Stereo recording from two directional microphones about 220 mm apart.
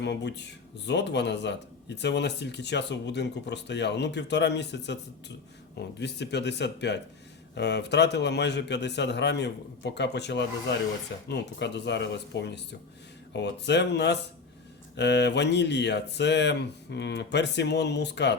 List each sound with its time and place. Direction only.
0.0 s speech: 50° left (ahead or behind)